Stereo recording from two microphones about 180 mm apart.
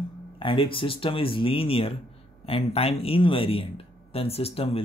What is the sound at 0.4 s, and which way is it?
Speech, 30° left (ahead or behind).